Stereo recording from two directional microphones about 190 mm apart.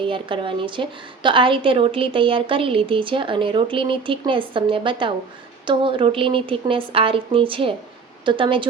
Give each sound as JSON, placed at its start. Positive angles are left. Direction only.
{"t": 0.0, "sound": "a woman's voice", "side_deg": -25}